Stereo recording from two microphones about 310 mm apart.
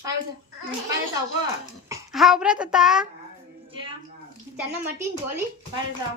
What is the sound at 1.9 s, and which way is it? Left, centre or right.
A child's voice, centre.